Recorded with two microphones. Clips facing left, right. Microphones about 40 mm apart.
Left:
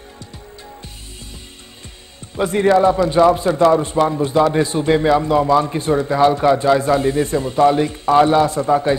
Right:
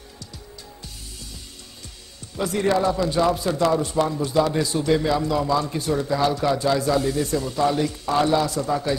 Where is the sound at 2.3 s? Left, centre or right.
Left.